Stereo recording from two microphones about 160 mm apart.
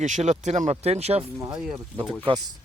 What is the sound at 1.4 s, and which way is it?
Speech, 20° right (ahead or behind).